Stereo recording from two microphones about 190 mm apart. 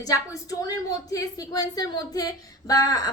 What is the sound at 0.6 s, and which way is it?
A woman's voice, 20° left (ahead or behind).